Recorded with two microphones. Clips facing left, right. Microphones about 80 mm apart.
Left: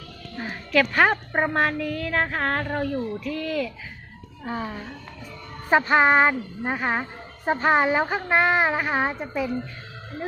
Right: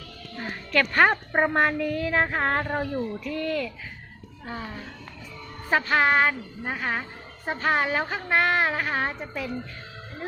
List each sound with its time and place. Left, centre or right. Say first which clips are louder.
0.3 s a woman's voice: left 3 dB; centre
4.4 s a woman's voice: left 5 dB; left